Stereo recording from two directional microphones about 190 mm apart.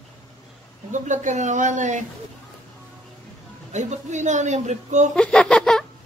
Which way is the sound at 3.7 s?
40° right (ahead or behind).